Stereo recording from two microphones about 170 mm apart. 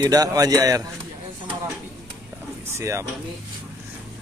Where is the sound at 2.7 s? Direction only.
15° right (ahead or behind).